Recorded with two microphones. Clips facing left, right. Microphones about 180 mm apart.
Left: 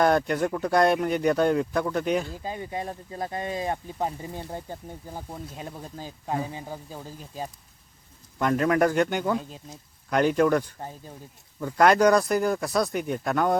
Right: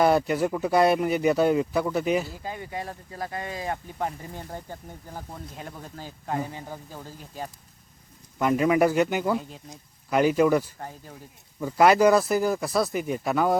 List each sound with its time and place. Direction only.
0.0 s speech: 5° right (ahead or behind)
2.4 s speech: 20° left (ahead or behind)
8.4 s speech: 5° right (ahead or behind)